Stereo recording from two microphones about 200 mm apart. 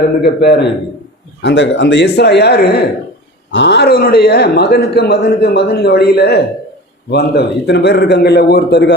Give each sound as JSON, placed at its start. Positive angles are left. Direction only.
{"t": 0.2, "sound": "a man's voice", "side_deg": 55}